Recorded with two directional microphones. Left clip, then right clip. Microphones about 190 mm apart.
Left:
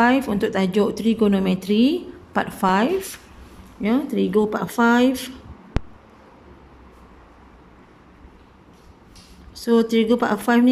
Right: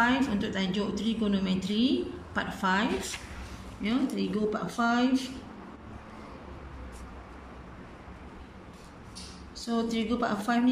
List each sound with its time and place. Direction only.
0.0 s speech: 40° left (ahead or behind)
9.6 s speech: 50° left (ahead or behind)